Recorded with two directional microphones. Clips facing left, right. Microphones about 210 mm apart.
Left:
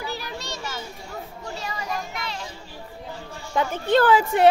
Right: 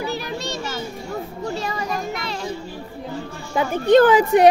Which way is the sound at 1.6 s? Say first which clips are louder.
Right 5 dB; 35° right (ahead or behind).